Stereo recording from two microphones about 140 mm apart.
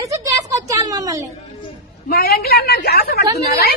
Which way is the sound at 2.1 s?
90° left.